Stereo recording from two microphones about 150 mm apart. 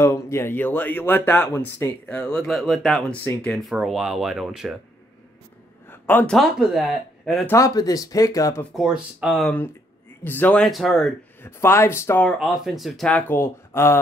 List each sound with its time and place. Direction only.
0.0 s speech: 15° left (ahead or behind)
2.0 s speech: 5° left (ahead or behind)
5.9 s a sound: 15° left (ahead or behind)
6.3 s speech: centre (ahead or behind)
7.4 s speech: 20° left (ahead or behind)
8.7 s speech: 5° right (ahead or behind)
10.2 s speech: 10° left (ahead or behind)
11.4 s speech: 15° left (ahead or behind)
12.3 s speech: centre (ahead or behind)
13.3 s speech: 15° left (ahead or behind)